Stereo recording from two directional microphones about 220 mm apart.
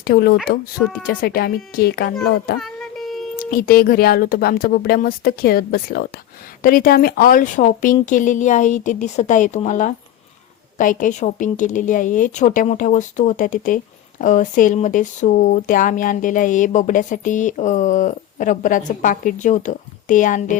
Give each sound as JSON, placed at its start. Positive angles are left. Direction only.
{"t": 0.0, "sound": "speech", "side_deg": 45}
{"t": 2.6, "sound": "a sound", "side_deg": 0}
{"t": 3.3, "sound": "a woman's voice", "side_deg": 40}